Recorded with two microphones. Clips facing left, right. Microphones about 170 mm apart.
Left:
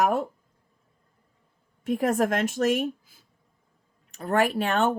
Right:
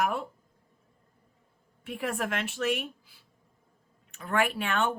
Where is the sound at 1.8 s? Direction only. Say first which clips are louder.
Left 9 dB; 40° left (ahead or behind).